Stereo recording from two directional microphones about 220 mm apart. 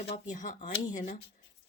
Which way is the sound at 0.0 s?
30° left (ahead or behind).